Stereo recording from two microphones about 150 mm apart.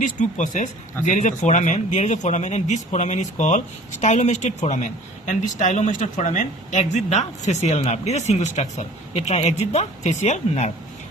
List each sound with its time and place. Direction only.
0.0 s speech: 55° left (ahead or behind)